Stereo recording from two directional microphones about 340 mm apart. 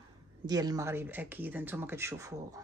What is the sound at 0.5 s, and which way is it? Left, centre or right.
Speech, centre.